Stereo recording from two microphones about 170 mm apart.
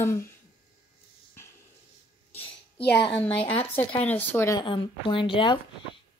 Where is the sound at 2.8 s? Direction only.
75° left (ahead or behind).